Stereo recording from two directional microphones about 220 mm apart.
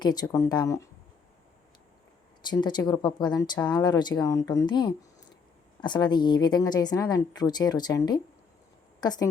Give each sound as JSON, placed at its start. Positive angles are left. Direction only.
{"t": 0.0, "sound": "speech", "side_deg": 15}
{"t": 2.4, "sound": "speech", "side_deg": 20}
{"t": 5.8, "sound": "a woman's voice", "side_deg": 20}